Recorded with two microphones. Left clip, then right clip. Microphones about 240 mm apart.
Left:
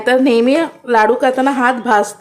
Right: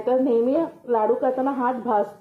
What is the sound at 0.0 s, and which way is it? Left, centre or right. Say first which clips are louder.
A woman's voice: left 8 dB; left.